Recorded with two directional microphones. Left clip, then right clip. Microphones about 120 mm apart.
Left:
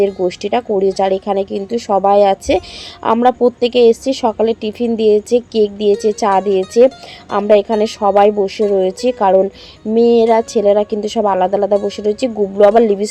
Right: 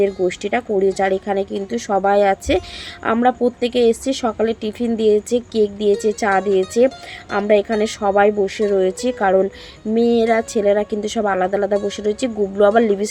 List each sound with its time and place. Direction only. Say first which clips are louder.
0.3 s a woman's voice: left 4 dB; 25° left (ahead or behind)